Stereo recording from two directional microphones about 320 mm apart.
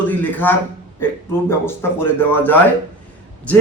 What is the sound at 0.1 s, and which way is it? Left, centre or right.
A man's voice, centre.